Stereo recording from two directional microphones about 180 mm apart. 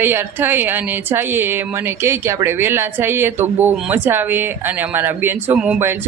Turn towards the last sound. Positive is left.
turn(degrees=-10)  # may be behind; listen again after turning